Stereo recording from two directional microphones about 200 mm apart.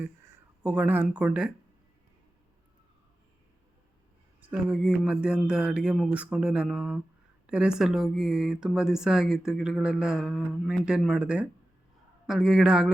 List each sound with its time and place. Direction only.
0.6 s speech: 5° right (ahead or behind)
4.4 s speech: 5° right (ahead or behind)